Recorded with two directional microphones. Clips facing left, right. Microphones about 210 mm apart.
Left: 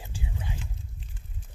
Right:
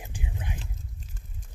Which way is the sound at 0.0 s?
15° right (ahead or behind).